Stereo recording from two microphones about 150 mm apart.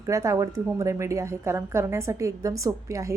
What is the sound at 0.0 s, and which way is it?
A woman's voice, 20° right (ahead or behind).